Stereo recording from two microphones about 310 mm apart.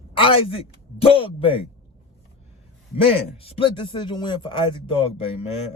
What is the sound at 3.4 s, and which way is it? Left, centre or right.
Speech, centre.